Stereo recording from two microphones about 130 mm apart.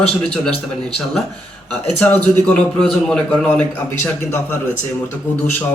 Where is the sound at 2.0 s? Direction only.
10° left (ahead or behind).